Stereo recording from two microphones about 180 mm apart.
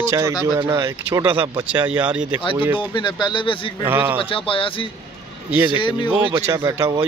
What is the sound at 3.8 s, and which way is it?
Speech, 10° right (ahead or behind).